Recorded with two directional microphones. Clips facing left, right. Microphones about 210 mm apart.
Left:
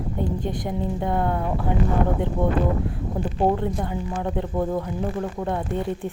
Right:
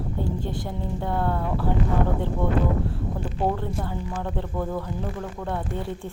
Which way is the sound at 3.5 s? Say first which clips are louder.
Left 4 dB; 15° left (ahead or behind).